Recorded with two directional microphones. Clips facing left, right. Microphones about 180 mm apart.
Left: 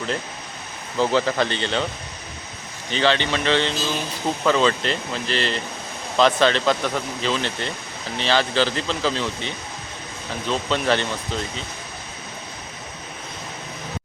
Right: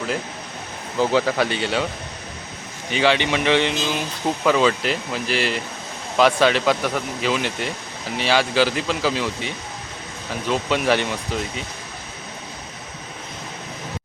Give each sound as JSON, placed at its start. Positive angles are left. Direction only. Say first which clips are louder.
{"t": 0.9, "sound": "speech", "louder": "right 1 dB", "side_deg": -5}
{"t": 2.9, "sound": "speech", "louder": "right 2 dB", "side_deg": -10}